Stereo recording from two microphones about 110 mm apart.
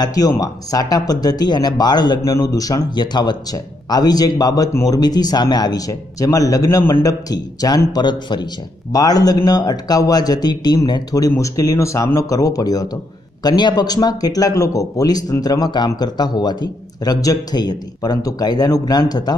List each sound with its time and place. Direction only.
0.0 s speech: 35° left (ahead or behind)